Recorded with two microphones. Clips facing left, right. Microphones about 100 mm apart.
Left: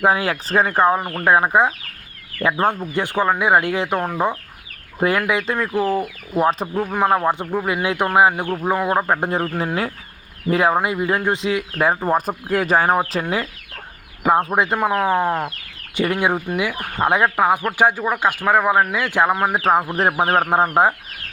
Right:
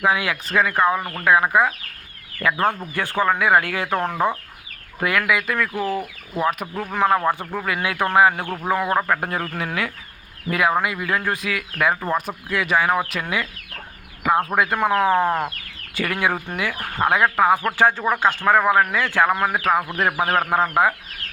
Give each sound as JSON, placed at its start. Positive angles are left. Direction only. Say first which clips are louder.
{"t": 0.0, "sound": "speech", "louder": "left 3 dB", "side_deg": 35}
{"t": 4.9, "sound": "speech", "louder": "left 2 dB", "side_deg": 30}
{"t": 6.8, "sound": "speech", "louder": "left 1 dB", "side_deg": 15}
{"t": 14.3, "sound": "speech", "louder": "left 2 dB", "side_deg": 25}
{"t": 14.8, "sound": "speech", "louder": "right 3 dB", "side_deg": 10}
{"t": 16.0, "sound": "speech", "louder": "left 4 dB", "side_deg": 20}